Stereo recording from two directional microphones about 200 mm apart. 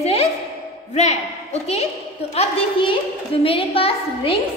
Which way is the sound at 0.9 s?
35° left (ahead or behind).